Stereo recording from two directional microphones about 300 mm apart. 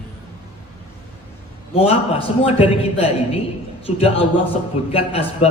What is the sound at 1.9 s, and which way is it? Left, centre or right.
A man's voice, centre.